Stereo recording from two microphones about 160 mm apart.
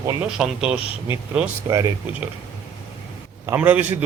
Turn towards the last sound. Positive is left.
turn(degrees=-10)  # may be behind; listen again after turning